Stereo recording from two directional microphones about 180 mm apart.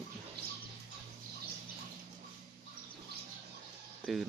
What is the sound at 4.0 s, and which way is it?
Speech, centre (ahead or behind).